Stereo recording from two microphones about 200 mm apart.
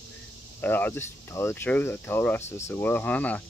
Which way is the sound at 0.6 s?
10° left (ahead or behind).